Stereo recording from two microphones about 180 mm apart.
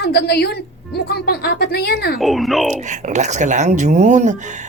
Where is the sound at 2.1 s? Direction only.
Centre (ahead or behind).